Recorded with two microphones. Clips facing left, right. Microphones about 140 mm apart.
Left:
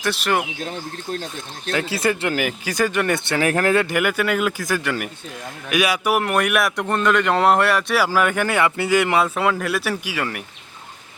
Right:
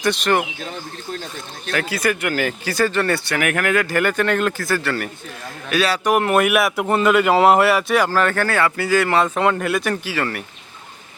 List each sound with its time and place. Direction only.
0.0 s speech: 5° left (ahead or behind)
1.7 s speech: 25° left (ahead or behind)
2.4 s speech: 15° left (ahead or behind); by 3.9 s 30° left (ahead or behind)
3.9 s speech: 10° left (ahead or behind)
6.1 s speech: centre (ahead or behind); by 9.2 s 15° left (ahead or behind)
9.2 s speech: 5° left (ahead or behind)